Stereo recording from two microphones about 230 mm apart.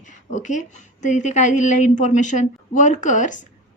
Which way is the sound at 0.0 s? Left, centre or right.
Left.